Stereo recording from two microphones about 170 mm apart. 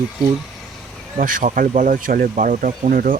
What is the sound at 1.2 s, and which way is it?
Speech, 50° right (ahead or behind).